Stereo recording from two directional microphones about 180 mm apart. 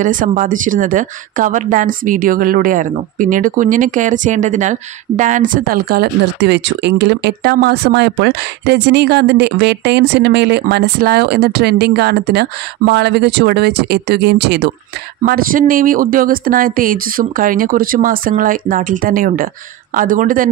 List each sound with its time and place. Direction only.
0.0 s a woman's voice: 45° right (ahead or behind); by 14.7 s 70° right (ahead or behind)
15.2 s speech: 55° right (ahead or behind)